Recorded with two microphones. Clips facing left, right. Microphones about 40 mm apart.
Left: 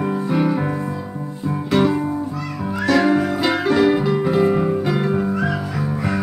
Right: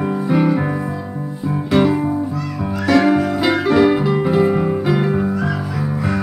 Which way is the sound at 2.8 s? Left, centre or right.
Centre.